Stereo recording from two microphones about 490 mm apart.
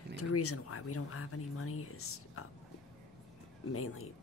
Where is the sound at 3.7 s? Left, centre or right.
Left.